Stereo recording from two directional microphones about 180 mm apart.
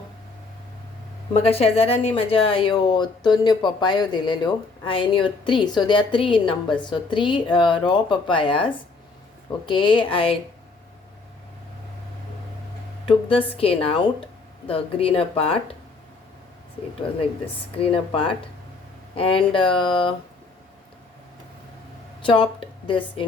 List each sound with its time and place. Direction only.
1.3 s speech: 35° left (ahead or behind)
13.1 s speech: 30° left (ahead or behind)
17.7 s speech: 30° left (ahead or behind)
22.9 s speech: 25° left (ahead or behind)